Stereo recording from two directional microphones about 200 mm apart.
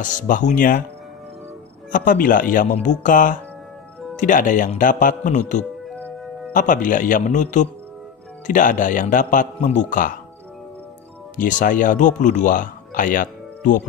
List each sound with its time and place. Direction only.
0.0 s a man's voice: 40° left (ahead or behind)
1.9 s a man's voice: 40° left (ahead or behind)
5.6 s music: 5° left (ahead or behind)
6.5 s a man's voice: 40° left (ahead or behind)
11.3 s a man's voice: 40° left (ahead or behind)